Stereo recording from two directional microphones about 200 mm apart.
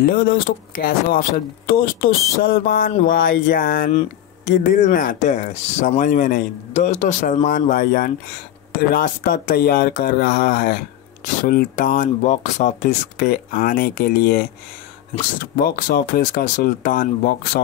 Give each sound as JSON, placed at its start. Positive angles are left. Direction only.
{"t": 0.0, "sound": "speech", "side_deg": 45}
{"t": 15.5, "sound": "speech", "side_deg": 45}